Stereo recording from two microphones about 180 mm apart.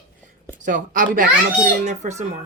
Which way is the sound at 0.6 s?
45° right (ahead or behind).